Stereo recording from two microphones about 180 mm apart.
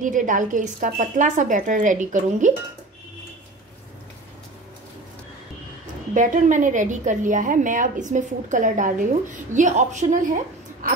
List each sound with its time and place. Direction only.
0.0 s a woman's voice: 45° right (ahead or behind)
6.1 s a woman's voice: 45° right (ahead or behind)